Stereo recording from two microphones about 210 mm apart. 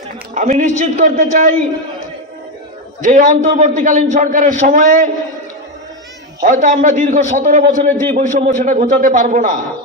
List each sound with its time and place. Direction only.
0.3 s a man's voice: 40° right (ahead or behind)
3.0 s a man's voice: 35° right (ahead or behind)
6.4 s a man's voice: 35° right (ahead or behind)